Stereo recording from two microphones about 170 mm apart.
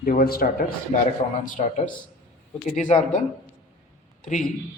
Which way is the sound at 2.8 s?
45° left (ahead or behind).